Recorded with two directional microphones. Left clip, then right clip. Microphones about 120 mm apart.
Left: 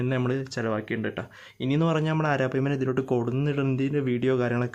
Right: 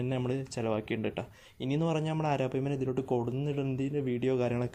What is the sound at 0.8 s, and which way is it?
Speech, 50° right (ahead or behind).